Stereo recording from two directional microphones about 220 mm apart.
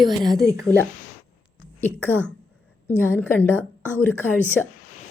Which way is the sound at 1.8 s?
10° left (ahead or behind).